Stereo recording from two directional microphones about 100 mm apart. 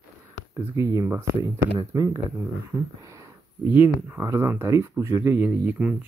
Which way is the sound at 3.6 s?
20° right (ahead or behind).